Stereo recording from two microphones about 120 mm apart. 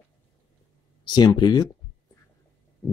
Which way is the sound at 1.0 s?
35° left (ahead or behind).